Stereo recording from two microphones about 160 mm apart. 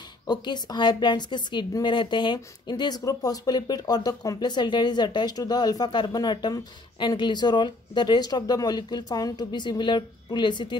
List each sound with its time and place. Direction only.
0.3 s a woman's voice: 25° left (ahead or behind)